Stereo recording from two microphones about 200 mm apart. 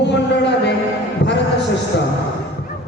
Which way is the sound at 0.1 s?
60° left (ahead or behind).